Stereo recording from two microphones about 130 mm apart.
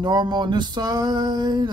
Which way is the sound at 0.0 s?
35° right (ahead or behind).